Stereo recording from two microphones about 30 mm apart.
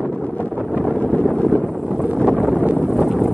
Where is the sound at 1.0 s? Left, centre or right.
Left.